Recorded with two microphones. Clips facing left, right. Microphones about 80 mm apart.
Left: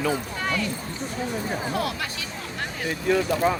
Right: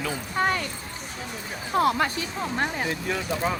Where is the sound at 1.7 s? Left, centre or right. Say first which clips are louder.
Right 6 dB; right.